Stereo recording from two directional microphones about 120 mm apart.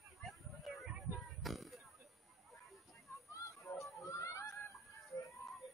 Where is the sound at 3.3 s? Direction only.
25° left (ahead or behind).